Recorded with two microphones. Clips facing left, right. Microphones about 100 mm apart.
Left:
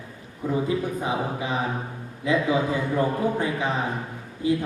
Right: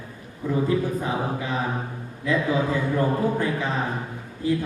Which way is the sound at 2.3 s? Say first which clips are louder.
Even; 20° left (ahead or behind).